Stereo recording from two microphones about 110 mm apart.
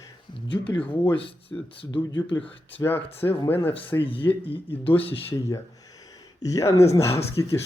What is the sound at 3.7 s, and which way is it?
Speech, 55° left (ahead or behind).